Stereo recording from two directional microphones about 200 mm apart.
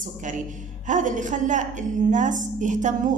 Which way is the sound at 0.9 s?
40° right (ahead or behind).